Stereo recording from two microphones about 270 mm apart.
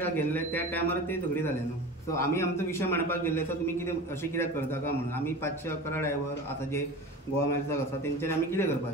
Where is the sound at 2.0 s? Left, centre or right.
Centre.